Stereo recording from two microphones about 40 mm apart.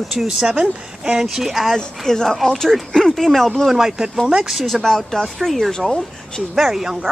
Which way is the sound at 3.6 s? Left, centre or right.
Centre.